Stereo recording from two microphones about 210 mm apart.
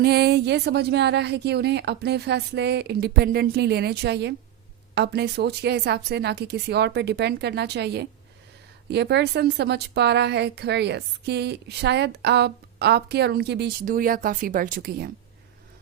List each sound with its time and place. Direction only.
0.0 s a woman's voice: 50° right (ahead or behind)